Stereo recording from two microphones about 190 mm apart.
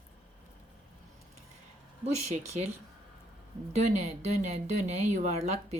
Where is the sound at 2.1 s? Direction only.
35° right (ahead or behind).